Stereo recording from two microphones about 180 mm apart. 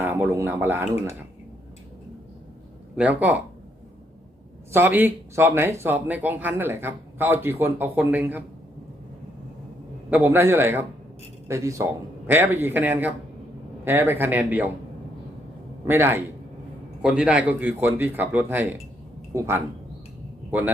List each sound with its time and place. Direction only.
0.0 s speech: 10° right (ahead or behind)
2.9 s speech: 10° right (ahead or behind)
4.7 s speech: 10° right (ahead or behind)
10.1 s speech: 10° right (ahead or behind)
15.9 s speech: 15° right (ahead or behind)